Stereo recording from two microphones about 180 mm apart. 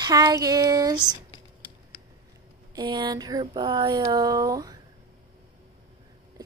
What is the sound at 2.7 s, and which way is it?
Speech, 25° right (ahead or behind).